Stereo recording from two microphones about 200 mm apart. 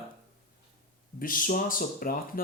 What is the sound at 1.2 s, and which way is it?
Speech, 45° left (ahead or behind).